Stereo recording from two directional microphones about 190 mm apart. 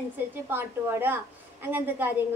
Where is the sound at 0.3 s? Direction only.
10° right (ahead or behind).